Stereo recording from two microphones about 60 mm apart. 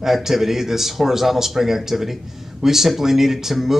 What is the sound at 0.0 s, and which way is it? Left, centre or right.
Speech, centre.